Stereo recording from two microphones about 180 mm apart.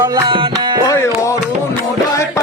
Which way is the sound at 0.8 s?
15° left (ahead or behind).